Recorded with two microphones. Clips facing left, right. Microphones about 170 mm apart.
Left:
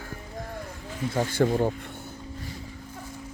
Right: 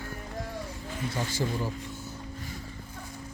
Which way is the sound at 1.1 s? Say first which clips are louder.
Left 9 dB; 55° left (ahead or behind).